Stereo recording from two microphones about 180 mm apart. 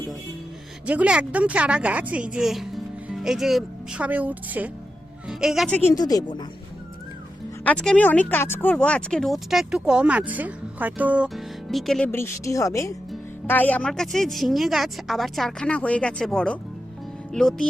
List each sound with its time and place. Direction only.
0.9 s a woman's voice: 5° right (ahead or behind)
5.9 s speech: 20° left (ahead or behind)
7.6 s speech: 5° left (ahead or behind)